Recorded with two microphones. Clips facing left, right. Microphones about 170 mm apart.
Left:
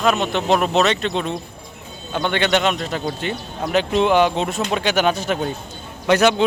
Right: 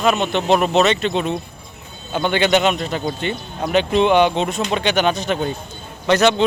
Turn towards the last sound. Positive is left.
turn(degrees=10)  # may be behind; listen again after turning